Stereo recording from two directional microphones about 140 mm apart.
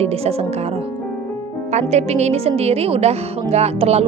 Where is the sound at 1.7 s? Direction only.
50° right (ahead or behind).